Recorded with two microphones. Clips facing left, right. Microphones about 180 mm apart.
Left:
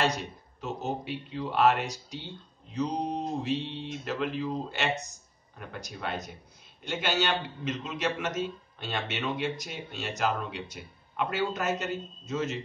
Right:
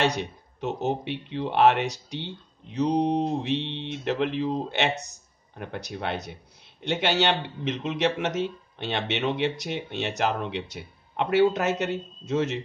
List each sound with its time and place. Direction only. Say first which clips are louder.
0.6 s a man's voice: right 6 dB; 65° right (ahead or behind)